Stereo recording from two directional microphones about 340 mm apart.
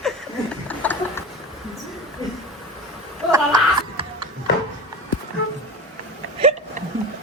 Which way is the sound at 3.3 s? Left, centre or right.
Centre.